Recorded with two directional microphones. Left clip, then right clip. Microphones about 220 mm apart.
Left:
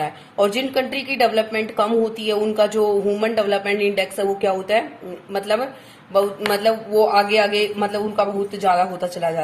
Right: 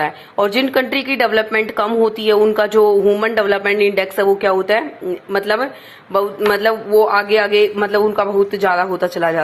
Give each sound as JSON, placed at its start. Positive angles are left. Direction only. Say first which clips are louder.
{"t": 0.0, "sound": "a man's voice", "louder": "right 3 dB", "side_deg": -20}